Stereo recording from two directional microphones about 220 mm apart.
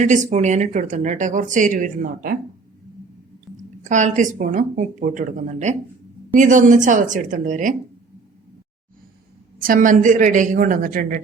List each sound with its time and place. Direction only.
0.0 s speech: 35° right (ahead or behind)
3.5 s a sound: centre (ahead or behind)
3.8 s speech: 35° right (ahead or behind)
9.6 s speech: 40° right (ahead or behind)